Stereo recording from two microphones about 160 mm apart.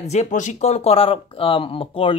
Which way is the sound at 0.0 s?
45° left (ahead or behind).